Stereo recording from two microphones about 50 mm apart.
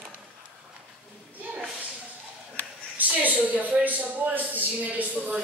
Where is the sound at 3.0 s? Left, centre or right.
Right.